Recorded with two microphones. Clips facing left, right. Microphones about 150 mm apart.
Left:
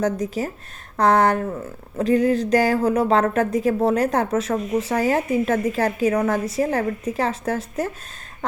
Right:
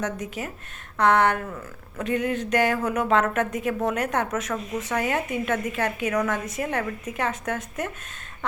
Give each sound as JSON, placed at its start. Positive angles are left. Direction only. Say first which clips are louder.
{"t": 0.0, "sound": "speech", "louder": "left 7 dB", "side_deg": 35}